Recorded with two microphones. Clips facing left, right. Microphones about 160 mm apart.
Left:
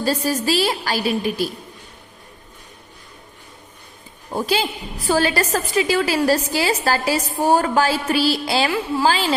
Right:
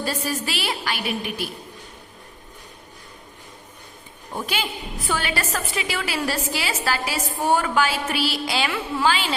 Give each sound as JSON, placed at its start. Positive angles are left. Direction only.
{"t": 0.0, "sound": "a woman's voice", "side_deg": 40}
{"t": 4.4, "sound": "a woman's voice", "side_deg": 35}